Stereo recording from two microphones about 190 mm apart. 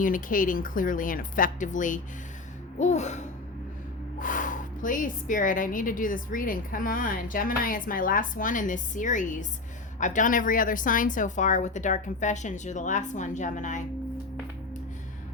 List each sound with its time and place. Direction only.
0.0 s speech: 45° left (ahead or behind)